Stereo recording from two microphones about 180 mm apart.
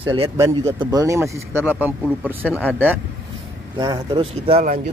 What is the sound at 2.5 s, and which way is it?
Speech, 10° left (ahead or behind).